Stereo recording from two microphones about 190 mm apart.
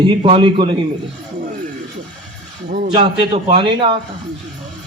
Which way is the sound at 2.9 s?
25° right (ahead or behind).